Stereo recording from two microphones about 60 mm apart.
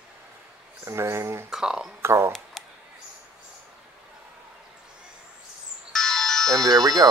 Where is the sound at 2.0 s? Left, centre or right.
Right.